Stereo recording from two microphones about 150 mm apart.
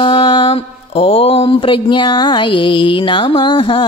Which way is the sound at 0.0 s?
35° left (ahead or behind).